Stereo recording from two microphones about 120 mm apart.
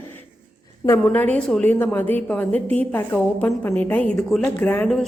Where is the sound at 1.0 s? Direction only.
10° left (ahead or behind).